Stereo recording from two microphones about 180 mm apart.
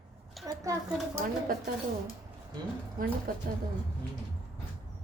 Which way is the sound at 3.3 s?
50° right (ahead or behind).